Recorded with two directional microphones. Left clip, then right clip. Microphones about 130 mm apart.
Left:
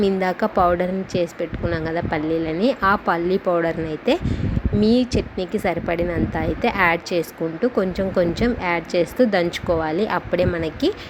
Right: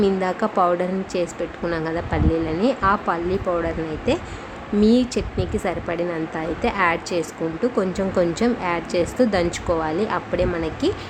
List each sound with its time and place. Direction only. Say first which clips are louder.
0.0 s a woman's voice: left 1 dB; 30° left (ahead or behind)
4.8 s a woman's voice: even; 20° left (ahead or behind)